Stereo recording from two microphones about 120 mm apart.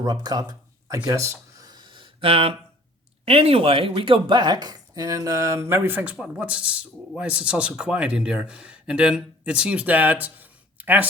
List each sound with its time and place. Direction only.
0.0 s speech: 35° right (ahead or behind)
1.0 s a sound: 25° right (ahead or behind); by 2.5 s 50° right (ahead or behind)
3.2 s speech: 55° right (ahead or behind); by 11.0 s 15° right (ahead or behind)